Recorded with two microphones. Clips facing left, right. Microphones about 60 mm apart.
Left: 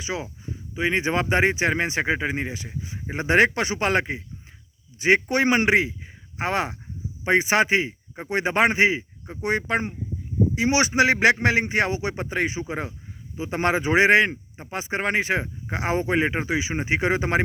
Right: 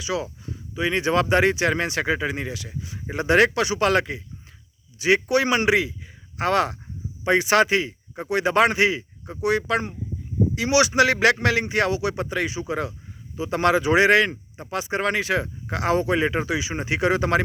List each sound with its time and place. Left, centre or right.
0.0 s a man's voice: left